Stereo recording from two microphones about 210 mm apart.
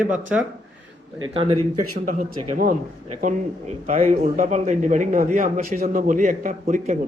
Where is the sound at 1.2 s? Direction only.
25° right (ahead or behind).